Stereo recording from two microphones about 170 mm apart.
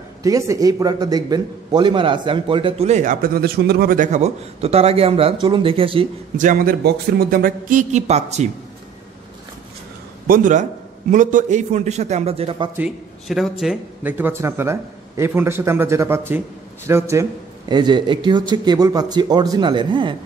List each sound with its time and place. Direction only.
0.2 s a man's voice: 20° right (ahead or behind)
6.3 s a man's voice: 50° right (ahead or behind)
10.2 s a man's voice: 55° right (ahead or behind); by 12.6 s 35° right (ahead or behind)
12.7 s speech: 5° right (ahead or behind); by 20.2 s 30° right (ahead or behind)